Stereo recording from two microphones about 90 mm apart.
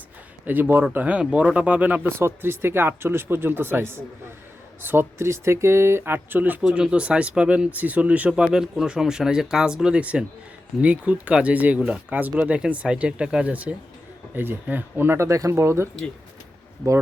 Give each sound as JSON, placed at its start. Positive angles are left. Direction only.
{"t": 0.4, "sound": "speech", "side_deg": -20}